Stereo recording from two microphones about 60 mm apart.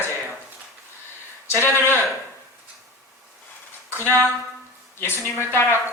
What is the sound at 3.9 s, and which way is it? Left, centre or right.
A woman's voice, left.